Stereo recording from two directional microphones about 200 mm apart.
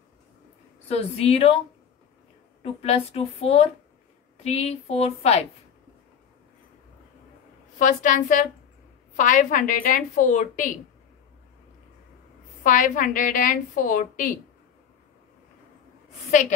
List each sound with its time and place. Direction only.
0.8 s a woman's voice: 30° left (ahead or behind)
2.6 s a woman's voice: 30° left (ahead or behind)
7.8 s a woman's voice: 40° left (ahead or behind)
12.6 s a woman's voice: 40° left (ahead or behind)
16.3 s a woman's voice: 35° left (ahead or behind)